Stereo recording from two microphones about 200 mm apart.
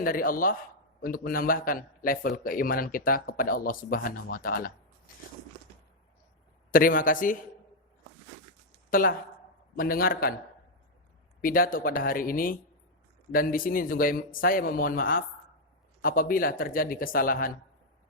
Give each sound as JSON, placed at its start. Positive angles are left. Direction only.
{"t": 0.0, "sound": "a man's voice", "side_deg": 45}
{"t": 6.7, "sound": "a man's voice", "side_deg": 45}
{"t": 8.9, "sound": "a man's voice", "side_deg": 45}
{"t": 11.3, "sound": "a man's voice", "side_deg": 45}